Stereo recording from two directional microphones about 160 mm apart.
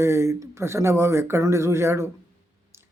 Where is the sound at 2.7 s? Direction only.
15° right (ahead or behind).